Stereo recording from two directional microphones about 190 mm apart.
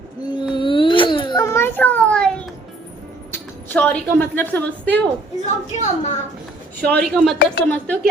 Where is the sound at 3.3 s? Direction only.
10° left (ahead or behind).